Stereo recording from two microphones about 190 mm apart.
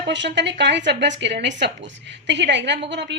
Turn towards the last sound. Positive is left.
turn(degrees=-65)  # may be behind; listen again after turning